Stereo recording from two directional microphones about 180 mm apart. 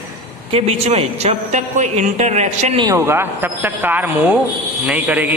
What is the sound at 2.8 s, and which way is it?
A man's voice, 15° right (ahead or behind).